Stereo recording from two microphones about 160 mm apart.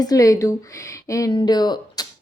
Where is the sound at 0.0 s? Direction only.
20° left (ahead or behind).